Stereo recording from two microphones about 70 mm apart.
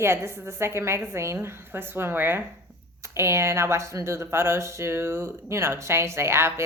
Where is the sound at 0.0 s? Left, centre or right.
Right.